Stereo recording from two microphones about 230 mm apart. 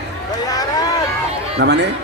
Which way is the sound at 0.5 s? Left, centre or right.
Centre.